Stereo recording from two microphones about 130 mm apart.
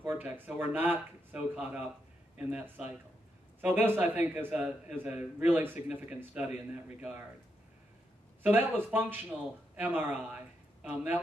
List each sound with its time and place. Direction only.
0.0 s speech: 15° right (ahead or behind)
3.6 s speech: 15° right (ahead or behind)
8.4 s speech: 15° right (ahead or behind)